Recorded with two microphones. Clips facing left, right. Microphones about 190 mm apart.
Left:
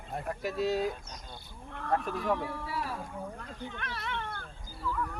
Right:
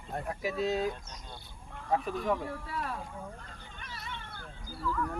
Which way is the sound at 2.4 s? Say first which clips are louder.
Left 1 dB; 70° left (ahead or behind).